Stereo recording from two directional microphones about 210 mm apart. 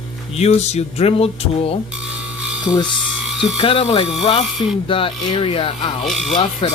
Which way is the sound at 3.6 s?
25° left (ahead or behind).